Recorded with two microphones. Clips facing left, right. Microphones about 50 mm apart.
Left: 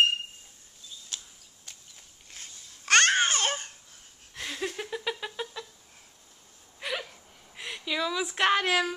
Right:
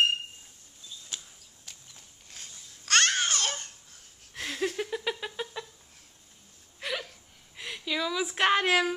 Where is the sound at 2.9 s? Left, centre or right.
Left.